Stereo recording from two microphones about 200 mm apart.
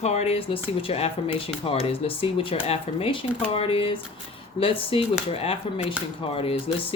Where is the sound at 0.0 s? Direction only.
35° left (ahead or behind).